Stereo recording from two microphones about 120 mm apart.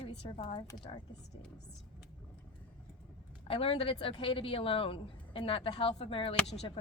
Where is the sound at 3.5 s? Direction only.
50° left (ahead or behind).